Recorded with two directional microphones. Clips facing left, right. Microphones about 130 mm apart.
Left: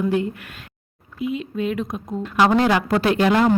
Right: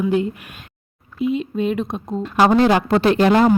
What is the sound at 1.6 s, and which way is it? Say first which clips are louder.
Speech: right 3 dB; 25° right (ahead or behind).